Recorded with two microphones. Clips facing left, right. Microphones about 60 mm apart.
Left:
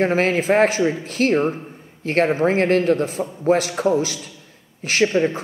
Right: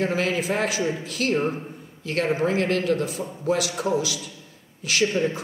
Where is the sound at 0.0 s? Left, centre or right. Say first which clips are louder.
Left 6 dB; left.